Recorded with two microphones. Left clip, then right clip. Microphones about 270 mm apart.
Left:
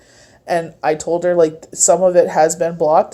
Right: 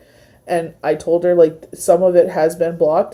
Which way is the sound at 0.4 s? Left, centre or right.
Centre.